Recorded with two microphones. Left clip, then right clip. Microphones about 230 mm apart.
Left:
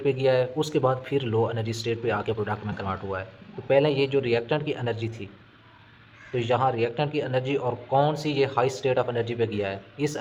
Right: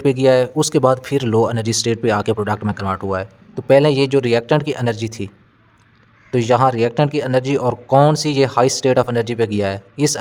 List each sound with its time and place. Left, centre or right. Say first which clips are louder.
0.0 s speech: right 9 dB; right
6.3 s speech: right 9 dB; right